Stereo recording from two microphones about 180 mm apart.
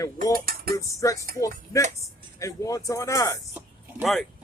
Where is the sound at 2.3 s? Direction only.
20° left (ahead or behind).